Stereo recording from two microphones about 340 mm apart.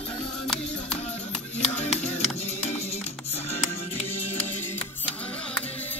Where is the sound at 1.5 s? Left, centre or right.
Centre.